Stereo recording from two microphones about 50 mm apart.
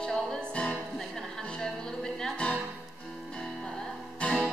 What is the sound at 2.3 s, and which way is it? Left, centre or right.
Music, left.